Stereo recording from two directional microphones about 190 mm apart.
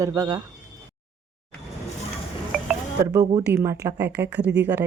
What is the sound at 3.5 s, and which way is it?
A woman's voice, 10° right (ahead or behind).